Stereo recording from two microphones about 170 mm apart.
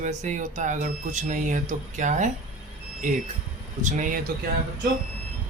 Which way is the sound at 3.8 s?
50° right (ahead or behind).